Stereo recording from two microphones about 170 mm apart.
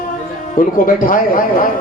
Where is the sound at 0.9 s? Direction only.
55° left (ahead or behind).